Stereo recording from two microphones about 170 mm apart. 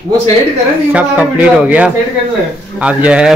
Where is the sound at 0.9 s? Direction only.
10° right (ahead or behind).